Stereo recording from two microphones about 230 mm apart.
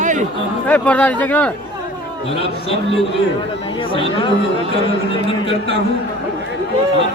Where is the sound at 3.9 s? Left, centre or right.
Left.